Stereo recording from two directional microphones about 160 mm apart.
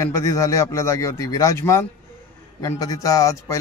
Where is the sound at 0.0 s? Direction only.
20° left (ahead or behind).